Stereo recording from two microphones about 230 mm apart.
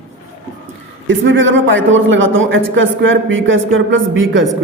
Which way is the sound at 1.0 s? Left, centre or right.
Right.